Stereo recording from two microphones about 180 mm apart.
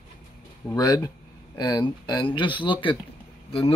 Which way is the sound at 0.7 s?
20° left (ahead or behind).